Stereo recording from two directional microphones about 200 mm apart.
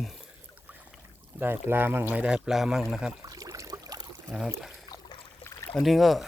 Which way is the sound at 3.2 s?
15° right (ahead or behind).